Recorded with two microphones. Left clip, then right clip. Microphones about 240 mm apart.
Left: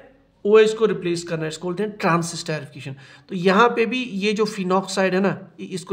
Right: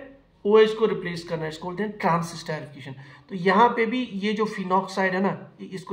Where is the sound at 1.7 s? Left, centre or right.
Left.